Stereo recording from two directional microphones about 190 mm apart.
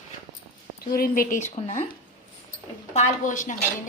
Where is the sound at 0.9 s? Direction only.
50° left (ahead or behind).